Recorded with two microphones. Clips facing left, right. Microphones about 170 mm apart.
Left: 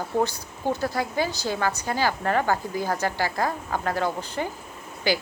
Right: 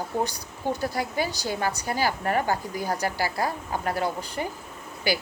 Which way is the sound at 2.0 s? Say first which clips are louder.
Left 2 dB; 45° left (ahead or behind).